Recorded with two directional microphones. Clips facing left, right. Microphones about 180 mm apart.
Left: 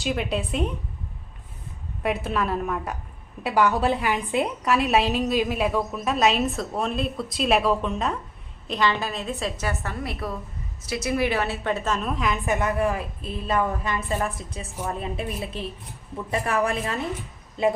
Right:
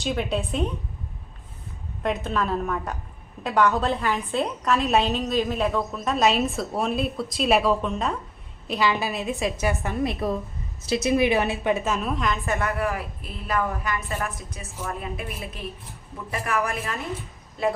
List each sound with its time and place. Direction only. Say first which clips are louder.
0.0 s a woman's voice: even; centre (ahead or behind)
2.0 s a woman's voice: even; 5° left (ahead or behind)
12.5 s a woman's voice: left 5 dB; 20° left (ahead or behind)